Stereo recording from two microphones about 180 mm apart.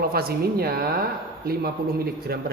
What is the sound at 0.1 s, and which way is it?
Speech, 55° right (ahead or behind).